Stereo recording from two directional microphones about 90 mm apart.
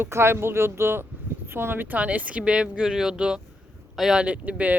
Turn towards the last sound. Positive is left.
turn(degrees=-15)  # may be behind; listen again after turning